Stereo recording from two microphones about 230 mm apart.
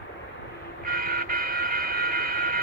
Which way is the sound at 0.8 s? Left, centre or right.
Right.